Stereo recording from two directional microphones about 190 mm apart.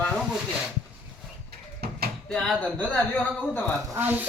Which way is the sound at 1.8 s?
55° right (ahead or behind).